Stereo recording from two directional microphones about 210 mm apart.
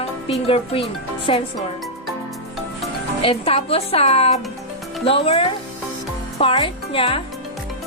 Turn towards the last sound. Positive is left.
turn(degrees=25)  # may be behind; listen again after turning